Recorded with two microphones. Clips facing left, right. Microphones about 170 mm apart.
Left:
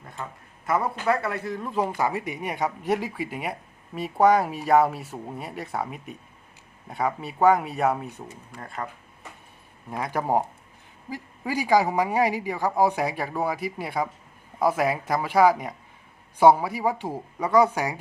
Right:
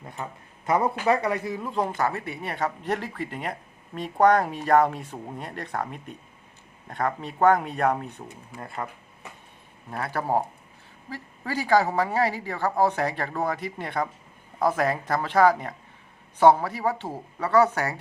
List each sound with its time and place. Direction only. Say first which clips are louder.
0.2 s speech: even; 20° right (ahead or behind)
2.0 s speech: left 1 dB; 15° left (ahead or behind)
8.5 s speech: right 1 dB; 5° right (ahead or behind)
9.9 s speech: left 1 dB; 15° left (ahead or behind)